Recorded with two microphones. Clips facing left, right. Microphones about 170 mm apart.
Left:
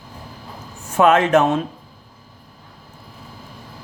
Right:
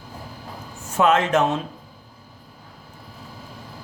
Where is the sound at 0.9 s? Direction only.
55° left (ahead or behind).